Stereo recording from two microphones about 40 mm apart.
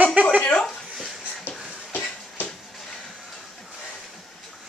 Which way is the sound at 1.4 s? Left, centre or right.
Left.